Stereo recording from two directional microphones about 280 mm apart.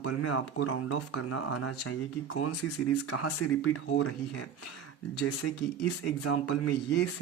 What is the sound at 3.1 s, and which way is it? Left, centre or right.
Speech, left.